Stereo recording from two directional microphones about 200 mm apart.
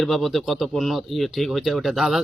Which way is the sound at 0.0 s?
Centre (ahead or behind).